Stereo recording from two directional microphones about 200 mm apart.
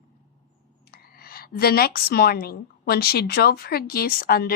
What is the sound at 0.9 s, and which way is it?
A woman's voice, 50° left (ahead or behind).